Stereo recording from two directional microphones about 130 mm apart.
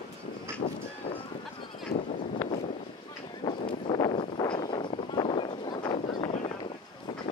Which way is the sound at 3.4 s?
40° left (ahead or behind).